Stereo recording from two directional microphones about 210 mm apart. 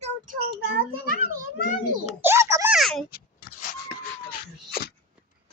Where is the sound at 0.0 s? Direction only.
45° right (ahead or behind).